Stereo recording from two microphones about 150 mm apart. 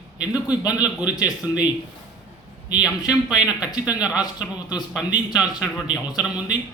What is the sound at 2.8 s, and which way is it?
Speech, 5° right (ahead or behind).